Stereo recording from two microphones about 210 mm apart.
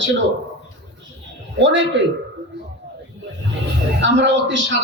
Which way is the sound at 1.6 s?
60° right (ahead or behind).